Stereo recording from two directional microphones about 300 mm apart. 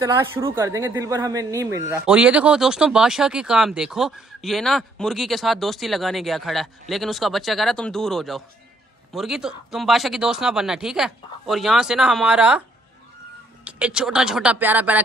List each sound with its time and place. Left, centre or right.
0.0 s speech: centre
13.7 s speech: centre